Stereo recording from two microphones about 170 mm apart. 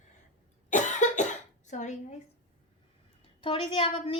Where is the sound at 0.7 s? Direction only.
45° left (ahead or behind).